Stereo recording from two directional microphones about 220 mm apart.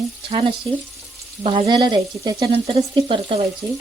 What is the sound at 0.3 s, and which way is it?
Frying, 25° right (ahead or behind).